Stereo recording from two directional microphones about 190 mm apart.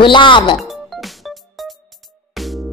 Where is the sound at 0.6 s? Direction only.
Centre (ahead or behind).